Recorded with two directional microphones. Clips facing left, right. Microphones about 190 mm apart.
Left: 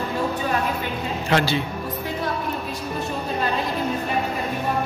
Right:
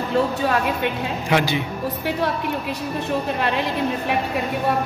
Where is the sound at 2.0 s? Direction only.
75° right (ahead or behind).